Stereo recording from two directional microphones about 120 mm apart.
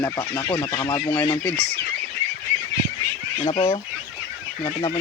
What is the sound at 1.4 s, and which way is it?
Speech, 10° left (ahead or behind).